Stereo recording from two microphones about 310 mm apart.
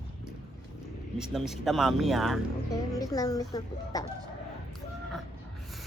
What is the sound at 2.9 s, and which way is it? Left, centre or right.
Speech, centre.